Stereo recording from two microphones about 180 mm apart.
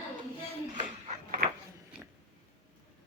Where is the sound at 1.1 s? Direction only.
50° right (ahead or behind).